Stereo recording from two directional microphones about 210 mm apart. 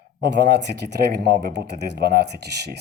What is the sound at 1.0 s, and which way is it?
Speech, 55° right (ahead or behind).